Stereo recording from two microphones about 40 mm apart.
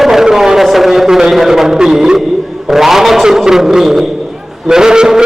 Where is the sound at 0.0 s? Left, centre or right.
Centre.